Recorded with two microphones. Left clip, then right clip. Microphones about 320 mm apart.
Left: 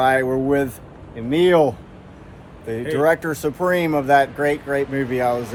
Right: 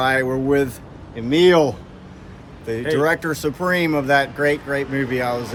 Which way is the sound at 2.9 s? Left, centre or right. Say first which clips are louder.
Left 1 dB; centre.